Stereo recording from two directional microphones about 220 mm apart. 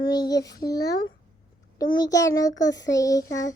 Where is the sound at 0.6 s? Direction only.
15° left (ahead or behind).